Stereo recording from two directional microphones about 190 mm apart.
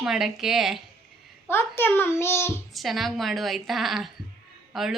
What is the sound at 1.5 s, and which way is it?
A child's voice, 10° left (ahead or behind).